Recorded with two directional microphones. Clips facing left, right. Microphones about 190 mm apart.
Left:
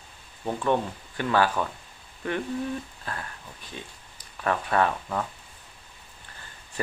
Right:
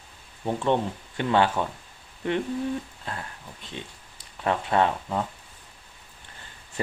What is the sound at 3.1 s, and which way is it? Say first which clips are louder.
Speech: even; 25° right (ahead or behind).